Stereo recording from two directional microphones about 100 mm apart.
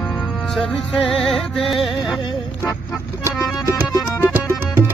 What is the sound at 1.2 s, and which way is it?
Music, centre (ahead or behind).